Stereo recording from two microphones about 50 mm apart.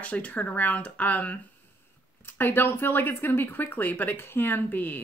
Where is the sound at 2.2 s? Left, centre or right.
Left.